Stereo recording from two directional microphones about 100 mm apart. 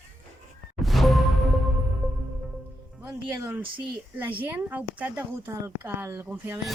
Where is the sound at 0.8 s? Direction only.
Centre (ahead or behind).